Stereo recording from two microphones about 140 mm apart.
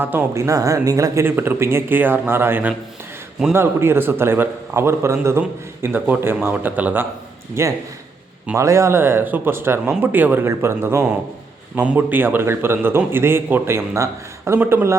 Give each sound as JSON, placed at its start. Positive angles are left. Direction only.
{"t": 0.0, "sound": "a man's voice", "side_deg": -15}